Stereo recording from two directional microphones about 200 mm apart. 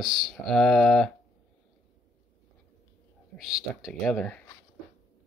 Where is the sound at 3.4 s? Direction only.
Centre (ahead or behind).